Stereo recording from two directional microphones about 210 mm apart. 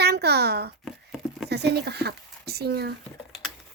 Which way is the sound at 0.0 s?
50° right (ahead or behind).